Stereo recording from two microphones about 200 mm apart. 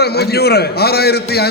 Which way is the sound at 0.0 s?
55° left (ahead or behind).